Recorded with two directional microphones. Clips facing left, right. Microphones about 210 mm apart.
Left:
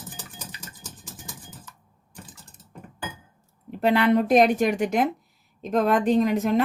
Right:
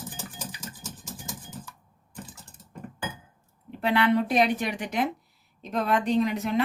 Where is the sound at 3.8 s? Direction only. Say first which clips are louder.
Left 4 dB; 45° left (ahead or behind).